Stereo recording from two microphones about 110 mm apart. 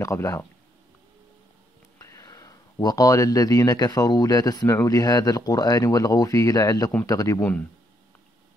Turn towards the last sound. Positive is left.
turn(degrees=20)  # may be behind; listen again after turning